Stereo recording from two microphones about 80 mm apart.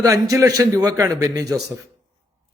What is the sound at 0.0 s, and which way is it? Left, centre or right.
A man's voice, right.